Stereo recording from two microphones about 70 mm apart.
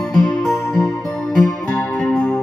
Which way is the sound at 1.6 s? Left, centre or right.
Centre.